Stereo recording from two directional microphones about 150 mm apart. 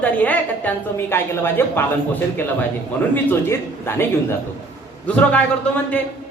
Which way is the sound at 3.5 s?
15° left (ahead or behind).